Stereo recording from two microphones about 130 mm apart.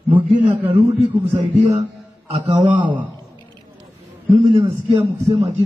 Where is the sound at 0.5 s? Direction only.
50° right (ahead or behind).